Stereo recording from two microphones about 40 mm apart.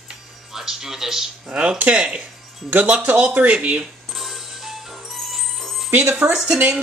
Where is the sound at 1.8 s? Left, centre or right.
Right.